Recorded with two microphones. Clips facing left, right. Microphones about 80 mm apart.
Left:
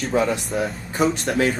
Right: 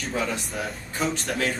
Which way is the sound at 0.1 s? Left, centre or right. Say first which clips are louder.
Left 7 dB; centre.